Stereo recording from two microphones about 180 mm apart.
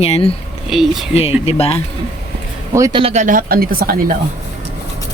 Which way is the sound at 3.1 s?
45° right (ahead or behind).